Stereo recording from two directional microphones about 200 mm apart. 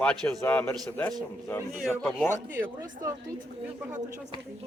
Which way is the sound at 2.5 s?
10° right (ahead or behind).